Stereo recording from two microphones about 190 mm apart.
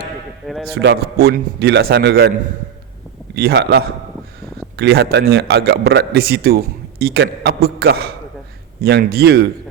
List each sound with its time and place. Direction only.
0.7 s a man's voice: 60° right (ahead or behind)
3.3 s a man's voice: 60° right (ahead or behind)